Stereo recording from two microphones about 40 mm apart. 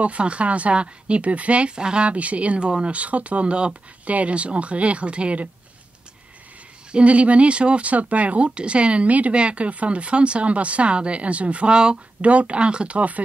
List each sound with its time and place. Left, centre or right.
0.0 s speech: right
1.8 s speech: right
6.9 s speech: right
8.5 s speech: right
11.7 s speech: right
12.2 s speech: right